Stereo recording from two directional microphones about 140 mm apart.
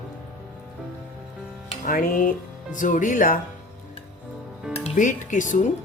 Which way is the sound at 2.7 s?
65° left (ahead or behind).